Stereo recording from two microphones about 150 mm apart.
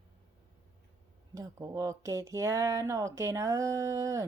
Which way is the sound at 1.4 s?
20° right (ahead or behind).